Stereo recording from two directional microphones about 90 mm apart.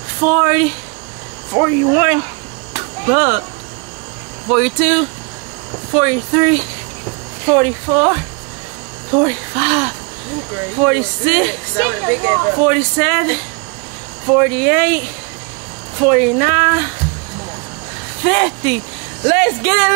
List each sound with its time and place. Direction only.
0.2 s speech: 15° right (ahead or behind)
2.7 s a sound: 15° right (ahead or behind)
4.5 s speech: 15° right (ahead or behind)
18.2 s speech: 15° right (ahead or behind)